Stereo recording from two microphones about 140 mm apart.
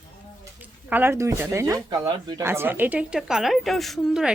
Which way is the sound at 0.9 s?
15° right (ahead or behind).